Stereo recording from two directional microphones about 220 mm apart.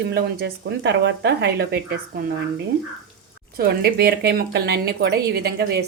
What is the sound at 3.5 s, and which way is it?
A woman's voice, 45° right (ahead or behind).